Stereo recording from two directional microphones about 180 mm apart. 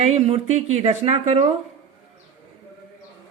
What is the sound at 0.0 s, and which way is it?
Speech, 40° right (ahead or behind).